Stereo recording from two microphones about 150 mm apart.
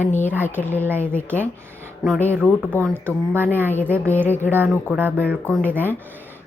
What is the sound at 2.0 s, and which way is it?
Speech, centre (ahead or behind).